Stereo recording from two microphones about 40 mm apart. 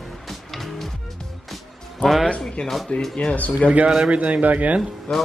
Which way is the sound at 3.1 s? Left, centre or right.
Left.